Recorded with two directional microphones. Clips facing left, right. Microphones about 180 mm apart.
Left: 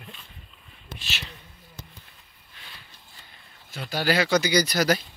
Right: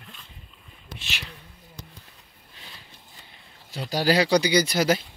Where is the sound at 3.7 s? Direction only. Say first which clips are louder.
Right 3 dB; 35° right (ahead or behind).